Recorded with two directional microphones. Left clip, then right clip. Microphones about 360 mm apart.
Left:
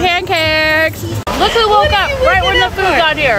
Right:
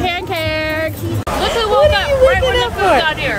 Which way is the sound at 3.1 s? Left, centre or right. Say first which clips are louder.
Left 5 dB; centre.